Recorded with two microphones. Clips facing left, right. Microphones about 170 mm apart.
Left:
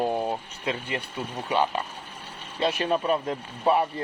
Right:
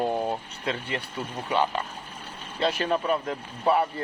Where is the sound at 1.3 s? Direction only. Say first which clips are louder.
Left 1 dB; 15° left (ahead or behind).